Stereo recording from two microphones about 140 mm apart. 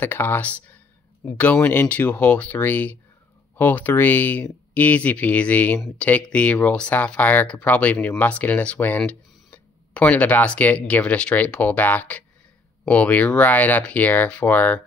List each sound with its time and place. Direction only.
0.0 s speech: 15° left (ahead or behind)